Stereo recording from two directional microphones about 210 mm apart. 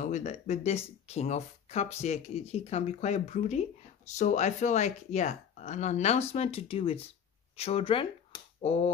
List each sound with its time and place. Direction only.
0.0 s speech: 35° left (ahead or behind)